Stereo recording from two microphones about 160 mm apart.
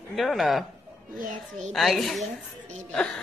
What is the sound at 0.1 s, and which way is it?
Speech, centre (ahead or behind).